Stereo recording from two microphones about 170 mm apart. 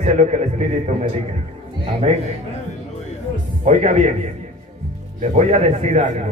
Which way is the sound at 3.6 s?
45° right (ahead or behind).